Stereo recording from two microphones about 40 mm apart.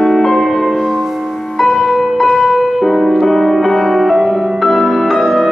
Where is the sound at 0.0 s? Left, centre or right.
Centre.